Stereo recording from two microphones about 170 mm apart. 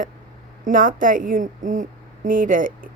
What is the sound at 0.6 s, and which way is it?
A woman's voice, 55° right (ahead or behind).